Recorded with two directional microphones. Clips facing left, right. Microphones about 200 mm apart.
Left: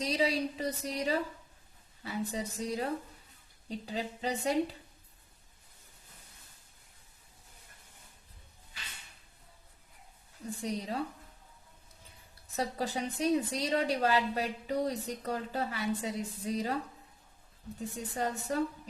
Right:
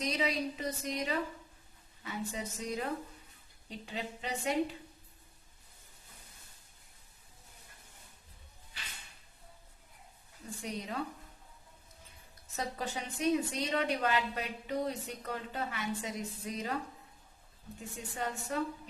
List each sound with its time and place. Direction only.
0.0 s a woman's voice: 30° left (ahead or behind)
10.6 s a woman's voice: 35° left (ahead or behind)
12.5 s a woman's voice: 35° left (ahead or behind)
17.7 s a woman's voice: 35° left (ahead or behind)